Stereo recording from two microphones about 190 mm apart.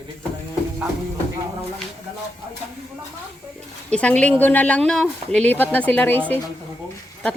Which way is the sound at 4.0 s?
5° left (ahead or behind).